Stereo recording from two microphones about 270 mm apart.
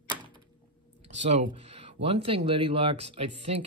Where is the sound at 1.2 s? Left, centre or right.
Right.